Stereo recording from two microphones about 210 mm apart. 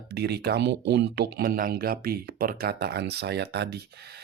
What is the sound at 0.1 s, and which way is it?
Speech, 50° right (ahead or behind).